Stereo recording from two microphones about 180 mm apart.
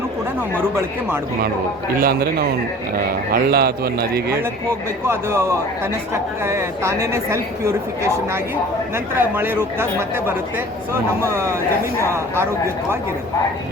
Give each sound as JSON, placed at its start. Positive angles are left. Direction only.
{"t": 2.0, "sound": "a man's voice", "side_deg": -55}
{"t": 5.0, "sound": "a woman's voice", "side_deg": -15}
{"t": 11.2, "sound": "a woman's voice", "side_deg": -15}